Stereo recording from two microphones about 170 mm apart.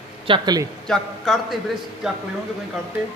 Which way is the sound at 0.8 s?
Centre (ahead or behind).